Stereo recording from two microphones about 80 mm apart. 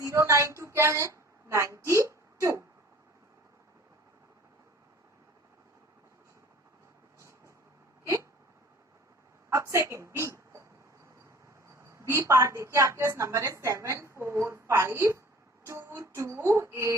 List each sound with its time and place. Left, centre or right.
0.0 s a woman's voice: right
7.2 s vehicle: right
8.0 s hiccup: right
9.6 s speech: right
11.7 s a woman's voice: right